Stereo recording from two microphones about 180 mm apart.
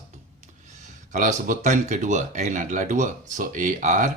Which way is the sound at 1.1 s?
45° right (ahead or behind).